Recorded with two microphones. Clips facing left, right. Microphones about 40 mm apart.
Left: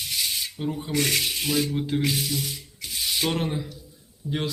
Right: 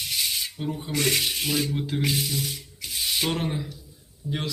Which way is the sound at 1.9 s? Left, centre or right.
Centre.